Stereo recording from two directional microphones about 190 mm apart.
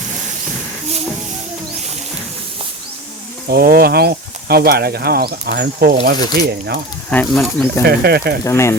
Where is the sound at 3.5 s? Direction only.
50° right (ahead or behind).